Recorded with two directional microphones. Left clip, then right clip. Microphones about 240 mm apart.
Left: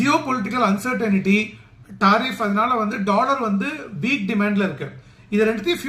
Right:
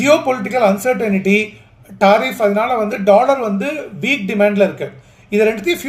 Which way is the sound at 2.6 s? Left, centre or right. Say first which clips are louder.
Right 4 dB; centre.